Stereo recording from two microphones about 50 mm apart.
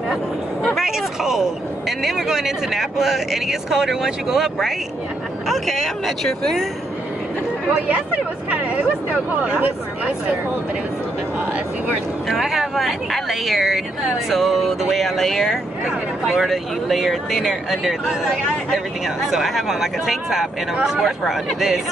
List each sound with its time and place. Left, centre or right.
0.8 s speech: centre
7.9 s speech: right
12.3 s speech: centre
19.3 s speech: centre